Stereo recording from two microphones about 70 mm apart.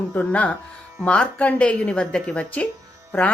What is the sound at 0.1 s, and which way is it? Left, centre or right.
A woman's voice, centre.